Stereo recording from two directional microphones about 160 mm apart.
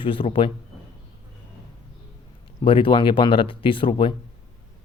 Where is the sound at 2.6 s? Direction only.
30° left (ahead or behind).